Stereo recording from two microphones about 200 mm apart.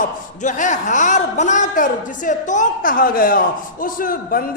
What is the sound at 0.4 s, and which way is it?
A man's voice, 40° left (ahead or behind).